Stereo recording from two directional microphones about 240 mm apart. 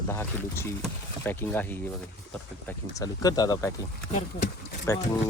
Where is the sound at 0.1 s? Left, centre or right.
Centre.